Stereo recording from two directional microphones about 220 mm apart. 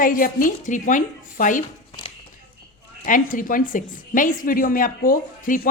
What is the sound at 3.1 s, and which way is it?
A woman's voice, 35° left (ahead or behind).